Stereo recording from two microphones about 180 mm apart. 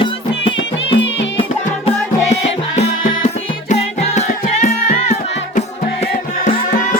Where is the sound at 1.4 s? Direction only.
35° left (ahead or behind).